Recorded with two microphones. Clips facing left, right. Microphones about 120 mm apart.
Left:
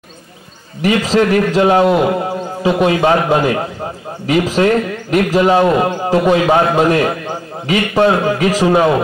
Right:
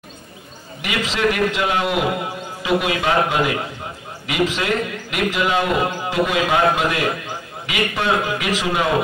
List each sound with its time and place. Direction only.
0.8 s a man's voice: 40° left (ahead or behind)